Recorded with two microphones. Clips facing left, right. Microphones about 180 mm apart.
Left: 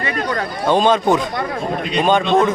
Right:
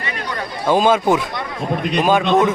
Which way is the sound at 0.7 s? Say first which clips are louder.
Even; 5° right (ahead or behind).